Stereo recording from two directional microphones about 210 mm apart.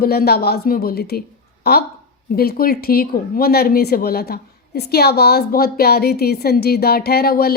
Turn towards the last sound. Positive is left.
turn(degrees=45)  # may be behind; listen again after turning